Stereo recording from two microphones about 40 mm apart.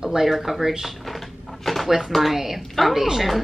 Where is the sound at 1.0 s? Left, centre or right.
Centre.